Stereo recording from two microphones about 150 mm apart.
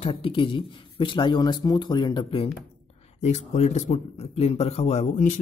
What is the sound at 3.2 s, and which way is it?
Speech, 50° left (ahead or behind).